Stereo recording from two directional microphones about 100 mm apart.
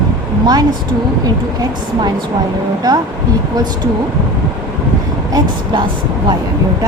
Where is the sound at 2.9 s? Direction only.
40° right (ahead or behind).